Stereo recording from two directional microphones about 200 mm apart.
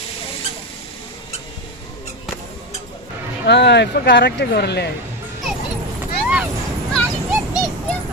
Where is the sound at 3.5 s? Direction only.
60° left (ahead or behind).